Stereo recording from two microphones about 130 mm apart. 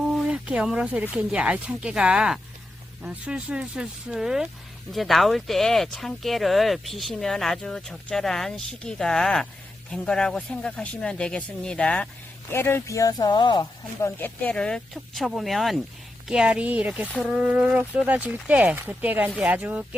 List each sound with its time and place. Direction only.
0.3 s speech: 10° right (ahead or behind); by 13.7 s 35° left (ahead or behind)
14.0 s speech: 15° left (ahead or behind); by 20.0 s 10° right (ahead or behind)